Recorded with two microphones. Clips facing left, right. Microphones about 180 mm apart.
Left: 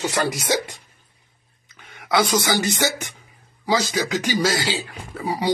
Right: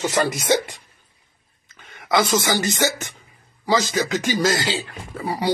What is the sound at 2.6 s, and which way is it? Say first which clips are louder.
Speech: right 1 dB; 15° left (ahead or behind).